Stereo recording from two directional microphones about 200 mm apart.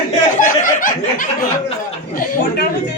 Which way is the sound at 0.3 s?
40° left (ahead or behind).